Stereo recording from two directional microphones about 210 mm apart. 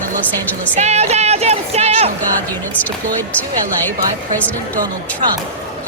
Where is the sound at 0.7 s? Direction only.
30° right (ahead or behind).